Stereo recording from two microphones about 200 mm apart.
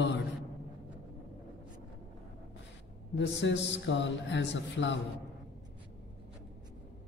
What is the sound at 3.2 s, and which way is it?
Mantra, 65° left (ahead or behind).